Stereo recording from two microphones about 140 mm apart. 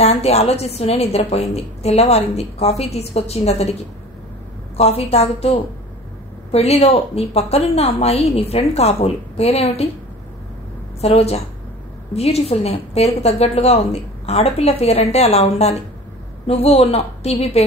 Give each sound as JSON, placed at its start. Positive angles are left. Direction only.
{"t": 0.0, "sound": "a woman's voice", "side_deg": 50}
{"t": 4.7, "sound": "a woman's voice", "side_deg": 45}
{"t": 11.0, "sound": "a woman's voice", "side_deg": 50}